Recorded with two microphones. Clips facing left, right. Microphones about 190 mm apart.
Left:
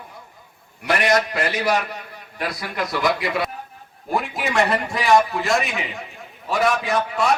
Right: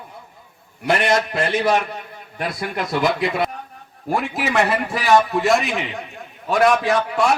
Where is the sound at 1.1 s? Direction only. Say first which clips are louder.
Right 1 dB; 25° right (ahead or behind).